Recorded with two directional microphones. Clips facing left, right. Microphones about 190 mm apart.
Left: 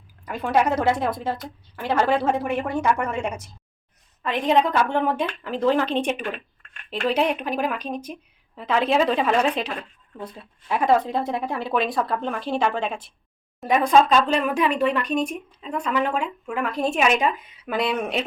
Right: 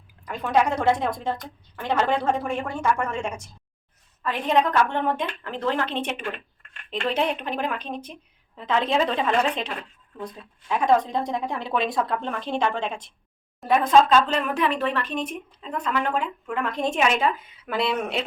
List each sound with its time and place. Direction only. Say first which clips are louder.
0.3 s speech: left 1 dB; 5° left (ahead or behind)